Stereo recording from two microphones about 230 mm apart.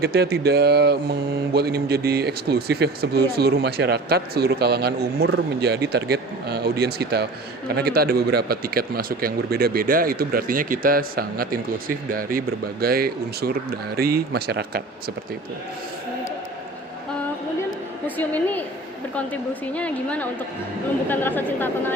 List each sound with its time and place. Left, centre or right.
0.0 s a man's voice: right
18.2 s a woman's voice: centre